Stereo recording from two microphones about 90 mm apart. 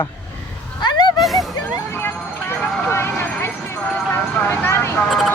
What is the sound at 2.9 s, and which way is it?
Vehicle, 25° left (ahead or behind).